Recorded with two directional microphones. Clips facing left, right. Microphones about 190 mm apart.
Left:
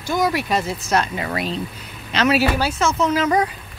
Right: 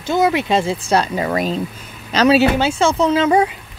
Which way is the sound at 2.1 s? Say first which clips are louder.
Right 5 dB; 30° right (ahead or behind).